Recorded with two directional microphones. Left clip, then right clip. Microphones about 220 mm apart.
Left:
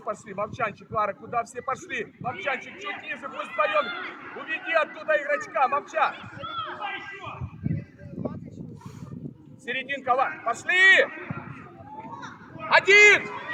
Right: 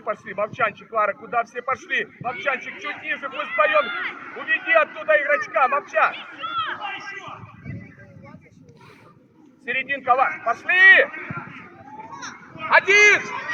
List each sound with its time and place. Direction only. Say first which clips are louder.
0.0 s speech: right 5 dB; 55° left (ahead or behind)
3.3 s speech: right 5 dB; 45° left (ahead or behind)
4.5 s speech: right 7 dB; 60° left (ahead or behind); by 6.7 s 40° left (ahead or behind)
6.7 s speech: right 3 dB; 40° right (ahead or behind)
9.6 s speech: right 5 dB; 60° left (ahead or behind)
12.1 s children playing: right 4 dB; centre (ahead or behind)
12.6 s speech: right 1 dB; 55° left (ahead or behind)